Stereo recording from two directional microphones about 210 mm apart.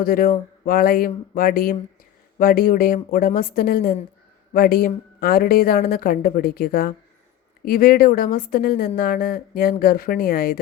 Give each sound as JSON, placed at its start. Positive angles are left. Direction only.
{"t": 0.0, "sound": "a woman's voice", "side_deg": 45}